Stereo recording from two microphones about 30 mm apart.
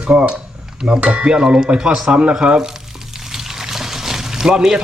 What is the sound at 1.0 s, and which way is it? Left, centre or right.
Speech, right.